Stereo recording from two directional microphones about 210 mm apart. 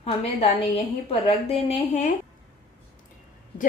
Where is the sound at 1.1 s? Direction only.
30° left (ahead or behind).